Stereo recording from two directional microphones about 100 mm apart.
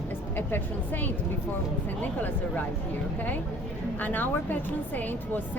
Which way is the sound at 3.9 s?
20° left (ahead or behind).